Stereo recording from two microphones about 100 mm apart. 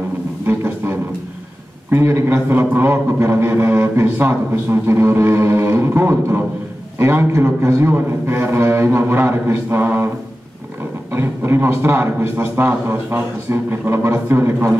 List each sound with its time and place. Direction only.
0.5 s music: 25° right (ahead or behind)
1.9 s speech: 25° right (ahead or behind)